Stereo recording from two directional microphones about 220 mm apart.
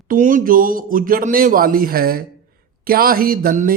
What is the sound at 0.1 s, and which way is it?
A man's voice, 35° right (ahead or behind).